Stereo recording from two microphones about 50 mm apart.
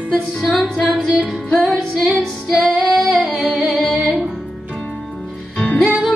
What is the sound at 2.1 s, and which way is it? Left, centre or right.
Music, centre.